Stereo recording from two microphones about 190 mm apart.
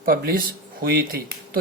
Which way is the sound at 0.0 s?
50° right (ahead or behind).